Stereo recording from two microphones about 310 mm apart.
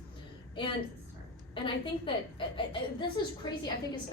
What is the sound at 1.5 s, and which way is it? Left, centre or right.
A woman's voice, centre.